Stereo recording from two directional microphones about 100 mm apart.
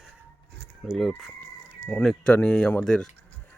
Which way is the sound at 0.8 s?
Centre (ahead or behind).